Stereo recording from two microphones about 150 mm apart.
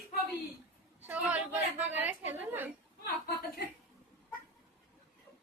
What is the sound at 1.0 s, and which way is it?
A woman's voice, 10° right (ahead or behind).